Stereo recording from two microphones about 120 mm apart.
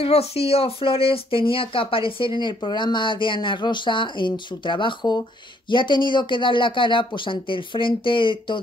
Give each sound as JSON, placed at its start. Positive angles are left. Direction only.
{"t": 0.0, "sound": "speech", "side_deg": 55}